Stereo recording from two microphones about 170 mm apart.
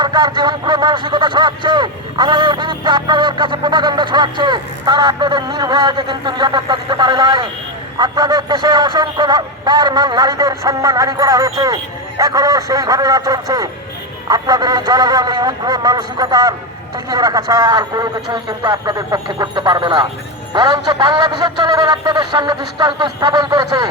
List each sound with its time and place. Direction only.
0.0 s speech: 25° right (ahead or behind)